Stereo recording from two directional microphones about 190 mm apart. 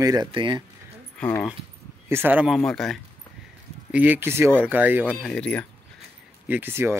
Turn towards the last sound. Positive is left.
turn(degrees=-15)  # may be behind; listen again after turning